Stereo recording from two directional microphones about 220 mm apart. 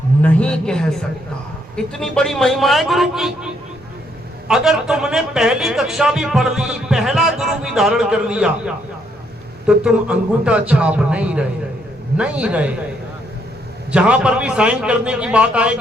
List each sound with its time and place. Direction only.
0.2 s a man's voice: 5° left (ahead or behind)
13.9 s a man's voice: 5° right (ahead or behind)